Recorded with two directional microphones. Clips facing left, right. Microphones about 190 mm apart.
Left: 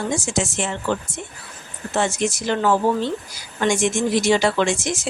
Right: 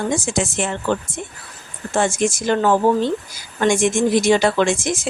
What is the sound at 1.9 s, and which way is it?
Speech, 50° right (ahead or behind).